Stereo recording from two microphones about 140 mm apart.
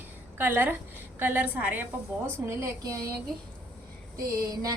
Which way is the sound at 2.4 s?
20° right (ahead or behind).